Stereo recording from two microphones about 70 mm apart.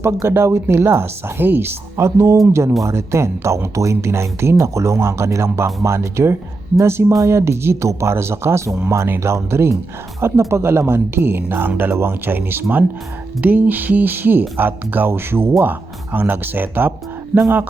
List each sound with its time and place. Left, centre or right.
0.0 s speech: right
13.4 s music: right
14.5 s speech: right
16.1 s music: right